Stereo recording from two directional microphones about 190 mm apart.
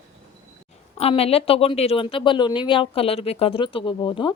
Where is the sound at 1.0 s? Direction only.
30° left (ahead or behind).